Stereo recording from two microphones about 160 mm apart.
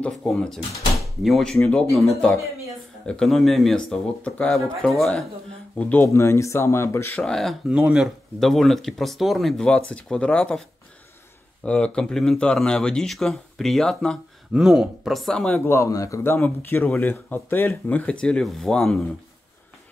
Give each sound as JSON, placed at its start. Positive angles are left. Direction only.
{"t": 0.0, "sound": "speech", "side_deg": 5}
{"t": 7.2, "sound": "speech", "side_deg": 0}
{"t": 11.6, "sound": "speech", "side_deg": 5}